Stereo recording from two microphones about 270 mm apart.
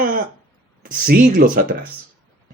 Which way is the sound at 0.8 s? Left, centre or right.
Right.